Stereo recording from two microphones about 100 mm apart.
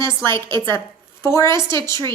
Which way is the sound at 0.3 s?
30° left (ahead or behind).